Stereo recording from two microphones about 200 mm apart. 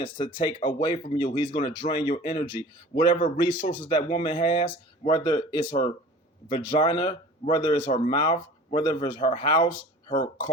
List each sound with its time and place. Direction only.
0.0 s speech: 25° left (ahead or behind)